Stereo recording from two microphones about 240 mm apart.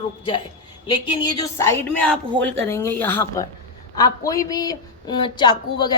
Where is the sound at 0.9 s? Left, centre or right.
Centre.